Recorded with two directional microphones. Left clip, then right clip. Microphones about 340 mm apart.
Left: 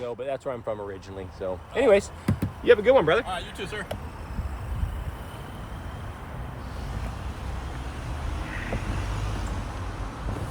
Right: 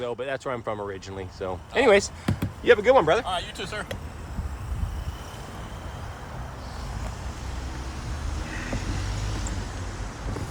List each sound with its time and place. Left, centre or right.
0.0 s a sound: right
1.4 s speech: right; by 3.8 s centre
8.8 s vehicle: centre